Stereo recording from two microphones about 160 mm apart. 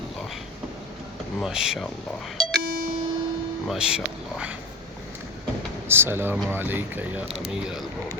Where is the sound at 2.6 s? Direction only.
65° left (ahead or behind).